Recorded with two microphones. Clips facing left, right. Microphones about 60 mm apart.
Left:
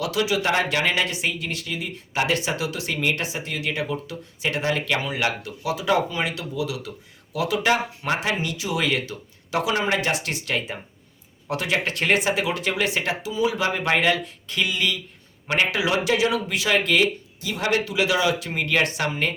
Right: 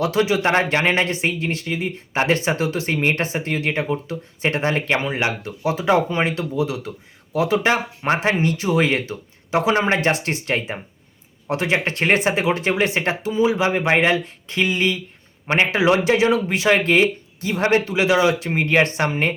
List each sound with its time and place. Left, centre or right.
0.0 s speech: right